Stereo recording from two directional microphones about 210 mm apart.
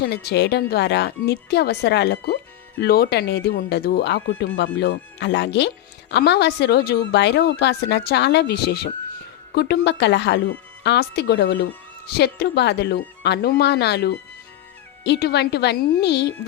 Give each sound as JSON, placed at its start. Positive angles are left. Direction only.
{"t": 0.0, "sound": "a woman's voice", "side_deg": 50}